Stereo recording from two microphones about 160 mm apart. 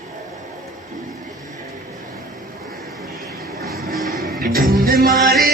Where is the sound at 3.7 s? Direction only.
65° right (ahead or behind).